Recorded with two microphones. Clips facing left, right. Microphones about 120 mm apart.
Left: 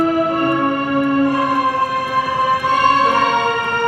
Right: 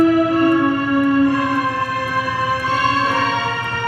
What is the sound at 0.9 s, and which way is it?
Music, 35° left (ahead or behind).